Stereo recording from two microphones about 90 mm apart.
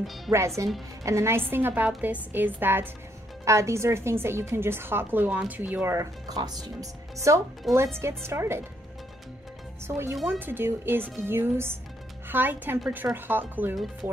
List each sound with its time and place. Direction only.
0.3 s speech: centre (ahead or behind)
1.0 s a woman's voice: 30° right (ahead or behind)
3.4 s a woman's voice: 35° right (ahead or behind)
5.9 s speech: 45° right (ahead or behind)
7.7 s speech: centre (ahead or behind)
8.0 s a woman's voice: 30° right (ahead or behind)
9.8 s a woman's voice: 30° right (ahead or behind)